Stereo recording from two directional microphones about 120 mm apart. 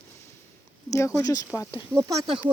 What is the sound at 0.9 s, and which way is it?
Speech, 25° left (ahead or behind).